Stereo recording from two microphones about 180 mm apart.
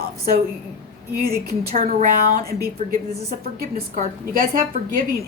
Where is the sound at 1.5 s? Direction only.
55° right (ahead or behind).